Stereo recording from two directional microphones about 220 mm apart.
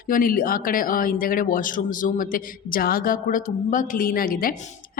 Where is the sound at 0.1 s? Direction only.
40° left (ahead or behind).